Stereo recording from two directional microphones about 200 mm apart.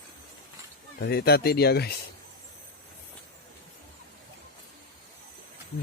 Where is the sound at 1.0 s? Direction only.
55° left (ahead or behind).